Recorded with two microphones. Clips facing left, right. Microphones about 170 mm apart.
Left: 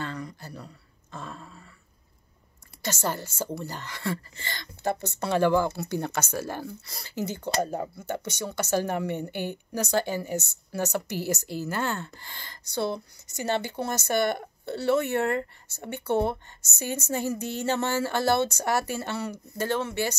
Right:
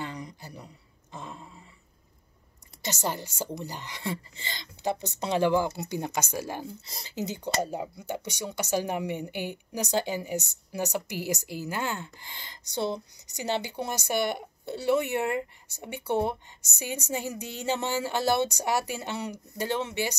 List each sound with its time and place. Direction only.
0.0 s speech: 15° right (ahead or behind)
1.1 s a sound: 15° right (ahead or behind)
2.8 s speech: 15° right (ahead or behind)